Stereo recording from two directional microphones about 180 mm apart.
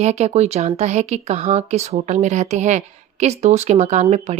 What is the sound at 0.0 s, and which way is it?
Speech, 40° right (ahead or behind).